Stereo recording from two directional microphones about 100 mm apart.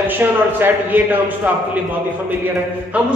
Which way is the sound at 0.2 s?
20° right (ahead or behind).